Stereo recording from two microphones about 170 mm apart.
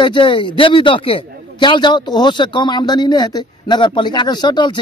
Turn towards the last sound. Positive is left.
turn(degrees=25)  # may be behind; listen again after turning